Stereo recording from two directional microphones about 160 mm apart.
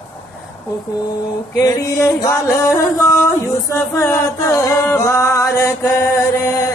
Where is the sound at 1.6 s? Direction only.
20° left (ahead or behind).